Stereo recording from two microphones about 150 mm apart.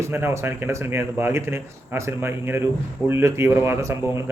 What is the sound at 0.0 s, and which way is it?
A man's voice, 15° right (ahead or behind).